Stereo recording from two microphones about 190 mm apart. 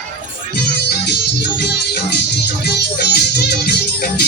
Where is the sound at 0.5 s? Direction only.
60° left (ahead or behind).